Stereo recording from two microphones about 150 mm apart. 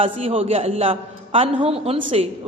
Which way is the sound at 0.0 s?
40° right (ahead or behind).